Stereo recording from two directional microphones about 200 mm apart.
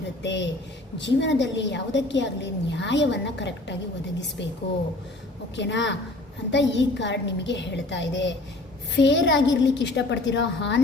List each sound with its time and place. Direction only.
0.2 s a woman's voice: 60° left (ahead or behind)
5.5 s a woman's voice: 60° left (ahead or behind)